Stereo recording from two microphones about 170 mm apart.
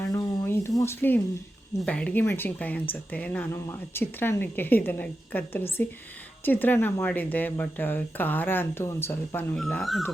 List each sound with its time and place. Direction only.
0.1 s a sound: 20° left (ahead or behind)
0.8 s speech: 15° left (ahead or behind)
9.6 s speech: centre (ahead or behind)